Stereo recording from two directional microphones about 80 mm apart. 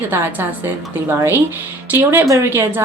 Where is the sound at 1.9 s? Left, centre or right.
Right.